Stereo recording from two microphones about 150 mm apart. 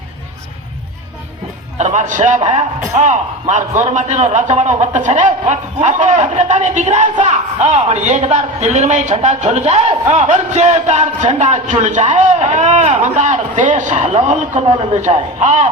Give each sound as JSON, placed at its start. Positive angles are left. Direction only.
{"t": 1.8, "sound": "a man's voice", "side_deg": -55}